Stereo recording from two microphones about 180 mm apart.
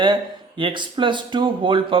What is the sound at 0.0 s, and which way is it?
Speech, 25° right (ahead or behind).